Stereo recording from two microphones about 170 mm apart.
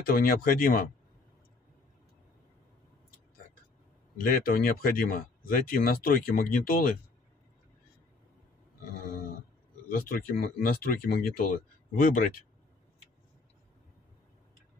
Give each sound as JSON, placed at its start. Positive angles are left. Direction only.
{"t": 0.0, "sound": "speech", "side_deg": 60}
{"t": 4.2, "sound": "speech", "side_deg": 60}
{"t": 9.8, "sound": "speech", "side_deg": 55}